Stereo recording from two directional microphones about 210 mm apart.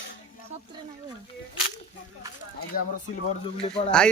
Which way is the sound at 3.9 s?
5° left (ahead or behind).